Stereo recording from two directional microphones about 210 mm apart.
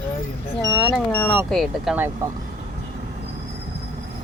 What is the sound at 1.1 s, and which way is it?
Speech, 10° left (ahead or behind).